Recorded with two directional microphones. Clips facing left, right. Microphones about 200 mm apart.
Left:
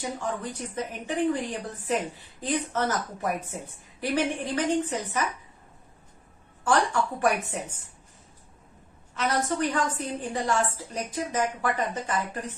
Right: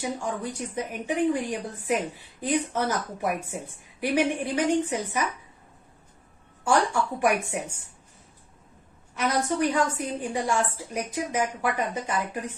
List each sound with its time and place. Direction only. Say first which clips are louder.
0.0 s speech: right 1 dB; 10° right (ahead or behind)
6.7 s speech: right 1 dB; 10° right (ahead or behind)
9.1 s speech: right 1 dB; 10° right (ahead or behind)